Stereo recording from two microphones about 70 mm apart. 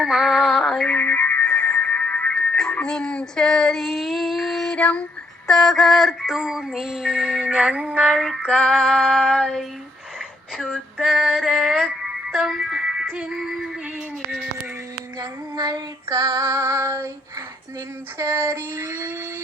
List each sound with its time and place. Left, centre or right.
0.0 s synthetic singing: centre
0.9 s music: left
2.8 s female singing: centre
3.8 s child singing: centre
4.8 s female singing: centre
5.5 s synthetic singing: centre
8.1 s child singing: centre
8.4 s female singing: centre
10.6 s music: centre
15.2 s female singing: right
18.2 s child singing: right